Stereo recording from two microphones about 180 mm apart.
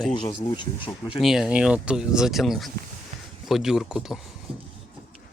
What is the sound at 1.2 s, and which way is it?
Speech, centre (ahead or behind).